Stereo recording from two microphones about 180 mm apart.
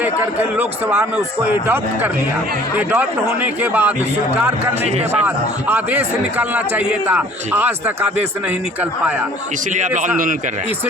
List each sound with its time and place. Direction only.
0.0 s a man's voice: 10° right (ahead or behind)
4.8 s speech: 35° right (ahead or behind)
5.2 s a man's voice: 10° right (ahead or behind)
9.7 s a man's voice: 40° right (ahead or behind)